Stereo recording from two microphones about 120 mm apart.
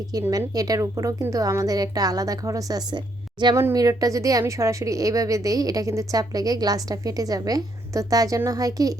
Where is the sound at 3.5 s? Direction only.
30° right (ahead or behind).